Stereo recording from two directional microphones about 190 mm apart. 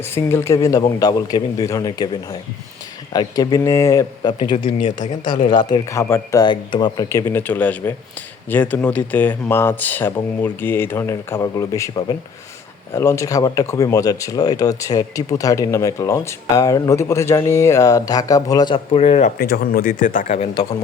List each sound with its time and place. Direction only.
0.0 s speech: 15° left (ahead or behind)
3.1 s speech: 20° left (ahead or behind)
19.4 s speech: 50° left (ahead or behind)